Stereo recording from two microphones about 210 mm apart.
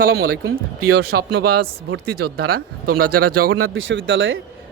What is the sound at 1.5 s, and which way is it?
Speech, 90° right.